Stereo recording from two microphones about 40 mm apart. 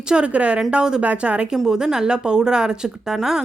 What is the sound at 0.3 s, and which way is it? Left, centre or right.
Speech, right.